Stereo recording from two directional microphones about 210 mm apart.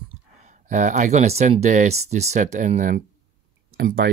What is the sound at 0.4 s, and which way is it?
Speech, 35° right (ahead or behind).